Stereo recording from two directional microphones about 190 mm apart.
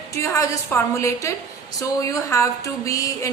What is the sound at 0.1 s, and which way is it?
A woman's voice, 15° left (ahead or behind).